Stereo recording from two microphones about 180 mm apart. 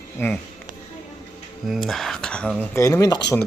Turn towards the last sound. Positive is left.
turn(degrees=15)  # may be behind; listen again after turning